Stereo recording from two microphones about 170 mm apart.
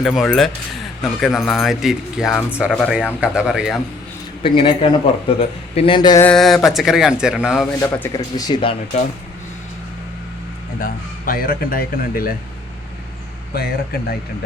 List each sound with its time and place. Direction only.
0.0 s speech: centre (ahead or behind)
4.4 s speech: 30° left (ahead or behind)
6.2 s speech: centre (ahead or behind)
7.8 s speech: 15° left (ahead or behind)
10.8 s speech: 55° left (ahead or behind)
13.5 s speech: 65° left (ahead or behind)